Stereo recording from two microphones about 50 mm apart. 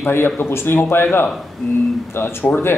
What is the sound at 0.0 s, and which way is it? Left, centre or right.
Speech, left.